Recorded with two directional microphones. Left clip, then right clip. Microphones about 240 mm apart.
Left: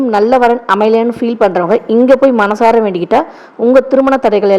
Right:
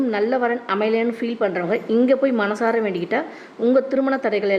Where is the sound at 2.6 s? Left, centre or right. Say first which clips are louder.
Left 11 dB; left.